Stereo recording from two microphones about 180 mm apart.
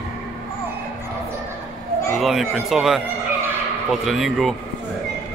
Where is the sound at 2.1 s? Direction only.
Centre (ahead or behind).